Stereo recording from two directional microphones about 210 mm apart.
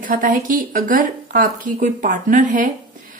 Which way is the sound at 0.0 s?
40° right (ahead or behind).